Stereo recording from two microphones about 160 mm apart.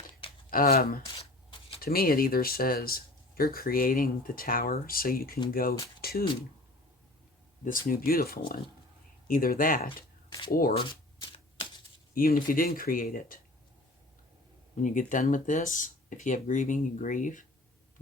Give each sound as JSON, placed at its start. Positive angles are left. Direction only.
{"t": 0.5, "sound": "speech", "side_deg": 65}
{"t": 1.2, "sound": "a sound", "side_deg": 40}
{"t": 1.8, "sound": "speech", "side_deg": 70}
{"t": 6.0, "sound": "a sound", "side_deg": 70}
{"t": 7.6, "sound": "speech", "side_deg": 60}
{"t": 10.8, "sound": "shuffling cards", "side_deg": 30}
{"t": 12.1, "sound": "speech", "side_deg": 60}
{"t": 14.8, "sound": "speech", "side_deg": 55}